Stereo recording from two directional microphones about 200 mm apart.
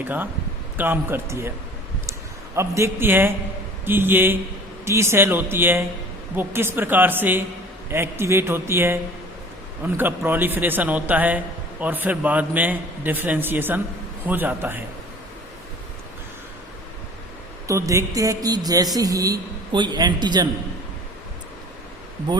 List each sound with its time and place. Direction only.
0.0 s a man's voice: 10° right (ahead or behind)
2.6 s a man's voice: 15° right (ahead or behind)
17.7 s a man's voice: 15° right (ahead or behind)